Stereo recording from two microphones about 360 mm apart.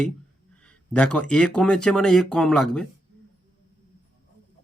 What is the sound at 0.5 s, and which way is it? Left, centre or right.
Speech, centre.